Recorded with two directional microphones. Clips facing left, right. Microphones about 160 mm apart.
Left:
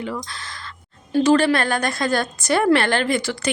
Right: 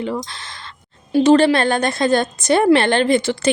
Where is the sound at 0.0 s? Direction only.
25° right (ahead or behind).